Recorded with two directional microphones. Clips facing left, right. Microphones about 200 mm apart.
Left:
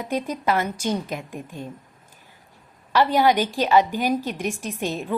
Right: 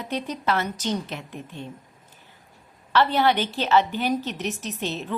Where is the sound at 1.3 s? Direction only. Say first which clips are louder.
Left 2 dB; 45° left (ahead or behind).